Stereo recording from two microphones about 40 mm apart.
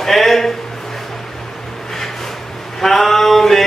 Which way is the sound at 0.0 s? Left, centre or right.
Centre.